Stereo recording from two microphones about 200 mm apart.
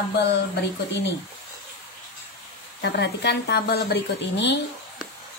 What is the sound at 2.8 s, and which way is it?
A woman's voice, 55° left (ahead or behind).